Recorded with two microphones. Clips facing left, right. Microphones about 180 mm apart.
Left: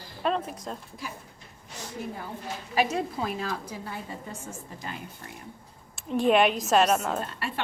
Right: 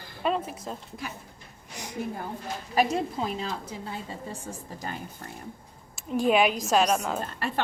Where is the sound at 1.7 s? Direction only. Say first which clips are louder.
Even; 15° right (ahead or behind).